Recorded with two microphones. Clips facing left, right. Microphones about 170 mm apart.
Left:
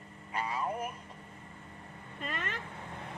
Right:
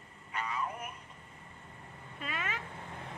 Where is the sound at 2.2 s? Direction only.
5° right (ahead or behind).